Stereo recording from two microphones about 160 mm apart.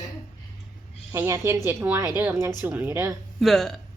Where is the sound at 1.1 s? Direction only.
20° right (ahead or behind).